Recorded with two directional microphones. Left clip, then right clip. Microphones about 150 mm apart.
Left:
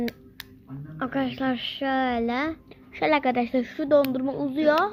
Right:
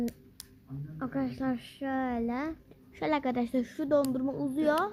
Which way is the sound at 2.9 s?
20° right (ahead or behind).